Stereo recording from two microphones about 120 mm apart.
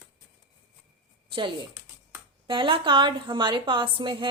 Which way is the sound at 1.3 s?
45° right (ahead or behind).